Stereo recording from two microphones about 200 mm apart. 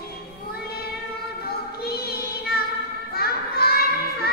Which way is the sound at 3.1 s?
50° left (ahead or behind).